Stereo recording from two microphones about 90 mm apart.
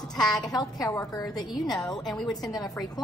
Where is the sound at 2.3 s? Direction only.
45° left (ahead or behind).